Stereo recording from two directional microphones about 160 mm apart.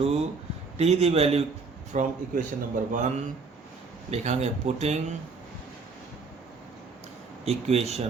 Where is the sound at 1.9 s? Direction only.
50° right (ahead or behind).